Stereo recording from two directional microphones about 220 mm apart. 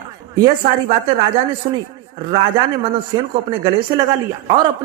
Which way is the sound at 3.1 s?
20° right (ahead or behind).